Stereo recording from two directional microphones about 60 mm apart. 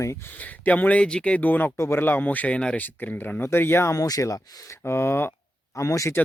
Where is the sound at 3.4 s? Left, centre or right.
Left.